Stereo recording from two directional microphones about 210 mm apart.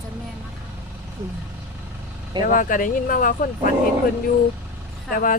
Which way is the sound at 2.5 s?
40° left (ahead or behind).